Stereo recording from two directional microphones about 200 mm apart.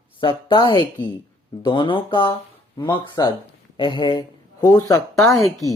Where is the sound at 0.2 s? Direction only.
25° left (ahead or behind).